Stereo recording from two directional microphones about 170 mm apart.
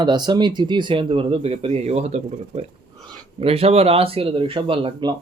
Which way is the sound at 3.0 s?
30° right (ahead or behind).